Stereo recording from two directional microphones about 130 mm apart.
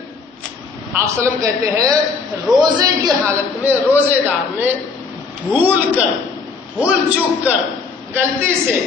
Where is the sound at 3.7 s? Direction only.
15° right (ahead or behind).